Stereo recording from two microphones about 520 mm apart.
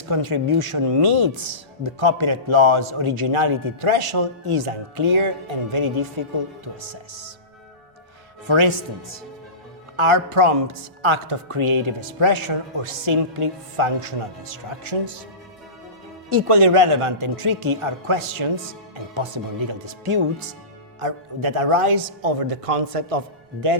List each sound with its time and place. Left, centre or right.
0.0 s speech: right
8.4 s speech: right
10.0 s speech: right
16.3 s speech: right